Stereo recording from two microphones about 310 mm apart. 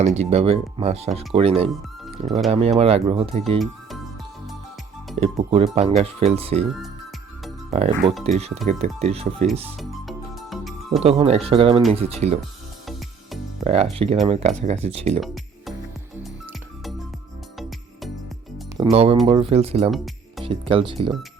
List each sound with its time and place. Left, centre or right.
0.0 s speech: right
5.1 s speech: centre
7.7 s speech: centre
9.7 s music: centre
11.0 s speech: centre
13.7 s speech: centre
16.1 s music: centre
18.8 s speech: centre